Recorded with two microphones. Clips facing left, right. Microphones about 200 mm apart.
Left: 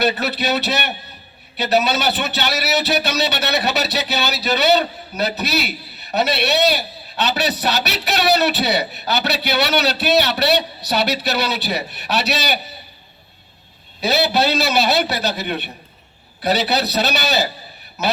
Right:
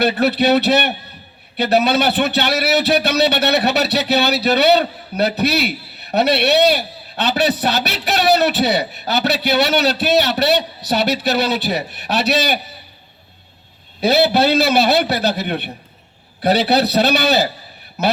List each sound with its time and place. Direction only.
0.0 s a man's voice: 55° right (ahead or behind)
14.0 s a man's voice: 55° right (ahead or behind)